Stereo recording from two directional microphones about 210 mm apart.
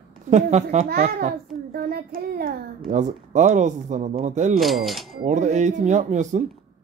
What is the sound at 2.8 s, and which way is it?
Speech, 35° right (ahead or behind).